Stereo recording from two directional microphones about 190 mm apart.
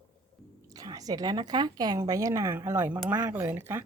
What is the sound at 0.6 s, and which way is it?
A woman's voice, 20° right (ahead or behind).